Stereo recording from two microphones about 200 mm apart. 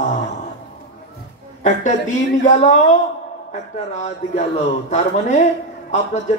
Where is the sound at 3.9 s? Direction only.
35° left (ahead or behind).